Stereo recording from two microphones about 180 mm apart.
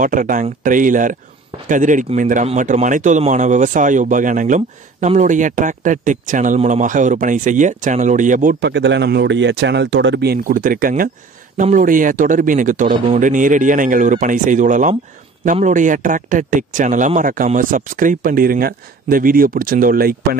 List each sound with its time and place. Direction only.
0.0 s speech: 50° right (ahead or behind)
8.5 s speech: 75° right (ahead or behind); by 20.2 s 55° right (ahead or behind)